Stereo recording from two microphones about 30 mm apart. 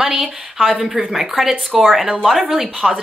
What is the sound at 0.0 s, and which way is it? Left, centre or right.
A woman's voice, centre.